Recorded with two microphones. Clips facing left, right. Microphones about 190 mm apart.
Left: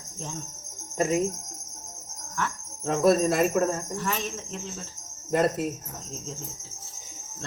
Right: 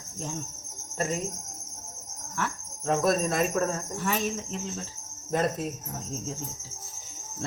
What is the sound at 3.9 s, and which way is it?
Speech, 5° right (ahead or behind).